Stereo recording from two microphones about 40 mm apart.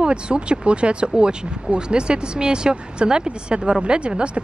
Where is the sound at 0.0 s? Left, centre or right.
Right.